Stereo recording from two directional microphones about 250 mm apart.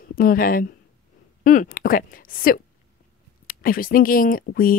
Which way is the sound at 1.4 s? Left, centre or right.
Left.